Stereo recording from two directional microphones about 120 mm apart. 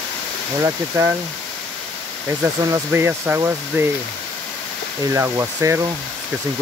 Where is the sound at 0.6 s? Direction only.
25° right (ahead or behind).